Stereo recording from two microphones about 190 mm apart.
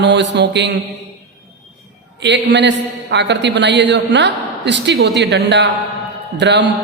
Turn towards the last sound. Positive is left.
turn(degrees=-65)  # may be behind; listen again after turning